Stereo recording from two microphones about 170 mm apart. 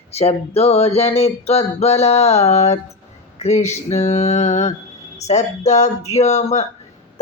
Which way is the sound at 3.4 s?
40° left (ahead or behind).